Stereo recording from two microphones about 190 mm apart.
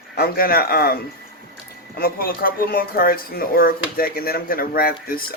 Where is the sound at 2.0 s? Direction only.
50° left (ahead or behind).